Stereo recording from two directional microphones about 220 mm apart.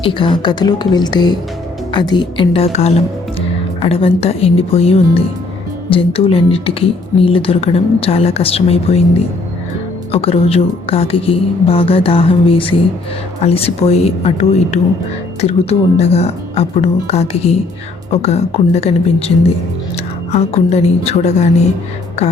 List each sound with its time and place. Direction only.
0.0 s speech: 20° left (ahead or behind)
16.0 s speech: 30° left (ahead or behind)
20.3 s speech: 30° left (ahead or behind)